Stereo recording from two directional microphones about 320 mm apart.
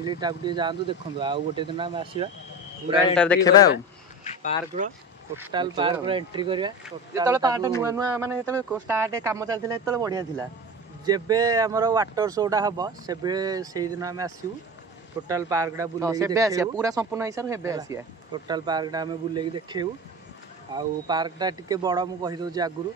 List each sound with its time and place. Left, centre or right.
0.0 s a man's voice: centre
3.2 s speech: centre
4.2 s a sound: centre
5.3 s a man's voice: centre